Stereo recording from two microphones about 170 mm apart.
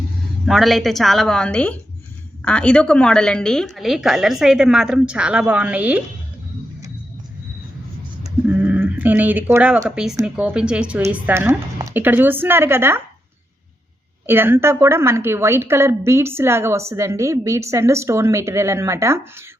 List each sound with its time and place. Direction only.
0.4 s a woman's voice: centre (ahead or behind)
8.2 s a sound: 10° right (ahead or behind)
9.9 s a woman's voice: 5° right (ahead or behind)
14.3 s a woman's voice: 15° right (ahead or behind)